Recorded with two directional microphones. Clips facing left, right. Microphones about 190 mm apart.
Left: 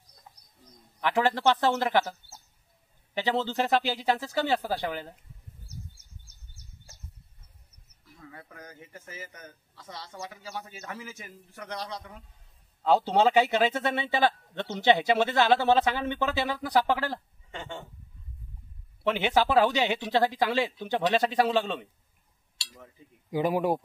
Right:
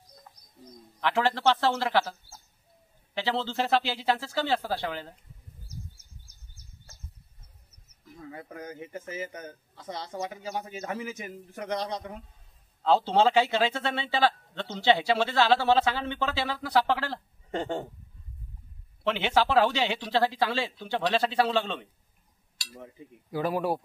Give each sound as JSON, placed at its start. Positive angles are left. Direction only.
{"t": 1.0, "sound": "speech", "side_deg": 15}
{"t": 3.2, "sound": "speech", "side_deg": 15}
{"t": 8.5, "sound": "a man's voice", "side_deg": -20}
{"t": 12.8, "sound": "speech", "side_deg": 15}
{"t": 17.5, "sound": "speech", "side_deg": -45}
{"t": 19.0, "sound": "speech", "side_deg": 15}
{"t": 23.3, "sound": "speech", "side_deg": 15}